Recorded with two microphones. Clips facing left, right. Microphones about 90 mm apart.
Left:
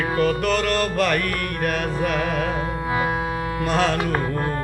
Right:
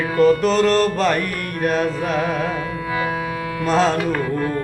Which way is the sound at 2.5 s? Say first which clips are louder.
Even; 30° left (ahead or behind).